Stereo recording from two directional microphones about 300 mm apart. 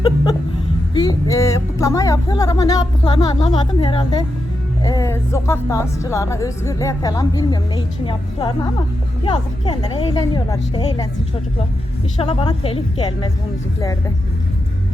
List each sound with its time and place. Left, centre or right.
0.9 s speech: centre
12.2 s speech: centre